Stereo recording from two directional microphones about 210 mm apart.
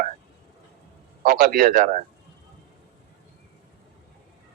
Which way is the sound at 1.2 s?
45° right (ahead or behind).